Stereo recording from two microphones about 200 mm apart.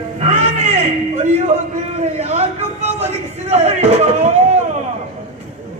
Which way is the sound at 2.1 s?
35° right (ahead or behind).